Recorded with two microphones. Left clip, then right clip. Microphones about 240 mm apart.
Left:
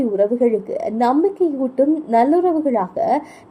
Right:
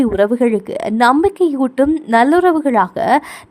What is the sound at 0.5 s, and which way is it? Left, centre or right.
A woman's voice, right.